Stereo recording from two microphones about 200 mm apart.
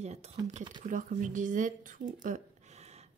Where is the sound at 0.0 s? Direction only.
35° right (ahead or behind).